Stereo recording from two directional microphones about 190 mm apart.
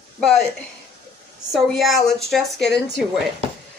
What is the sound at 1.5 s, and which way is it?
Speech, centre (ahead or behind).